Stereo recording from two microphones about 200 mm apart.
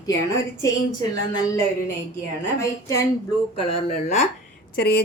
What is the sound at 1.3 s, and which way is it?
Speech, 15° left (ahead or behind).